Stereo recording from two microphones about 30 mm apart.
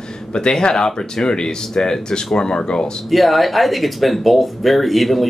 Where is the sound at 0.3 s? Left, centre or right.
Left.